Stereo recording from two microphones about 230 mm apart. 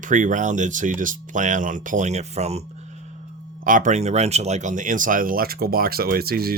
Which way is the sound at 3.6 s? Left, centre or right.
Right.